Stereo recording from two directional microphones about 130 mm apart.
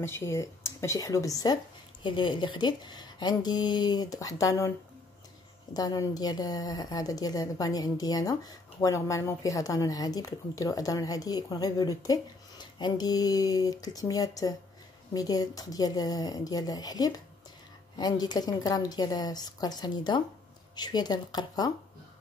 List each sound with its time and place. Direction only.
0.0 s a woman's voice: 20° left (ahead or behind)